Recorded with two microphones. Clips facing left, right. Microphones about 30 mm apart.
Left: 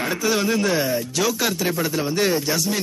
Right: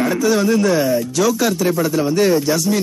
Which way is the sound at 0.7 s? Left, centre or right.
Centre.